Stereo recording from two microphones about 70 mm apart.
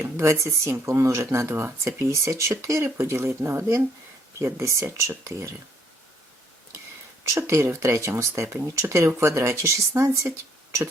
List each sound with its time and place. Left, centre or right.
0.0 s speech: right
1.6 s speech: right
7.3 s speech: right